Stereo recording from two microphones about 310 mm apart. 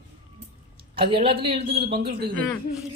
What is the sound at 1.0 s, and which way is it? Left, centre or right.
Speech, centre.